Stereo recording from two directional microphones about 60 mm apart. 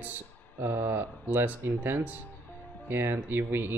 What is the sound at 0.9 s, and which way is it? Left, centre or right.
Speech, right.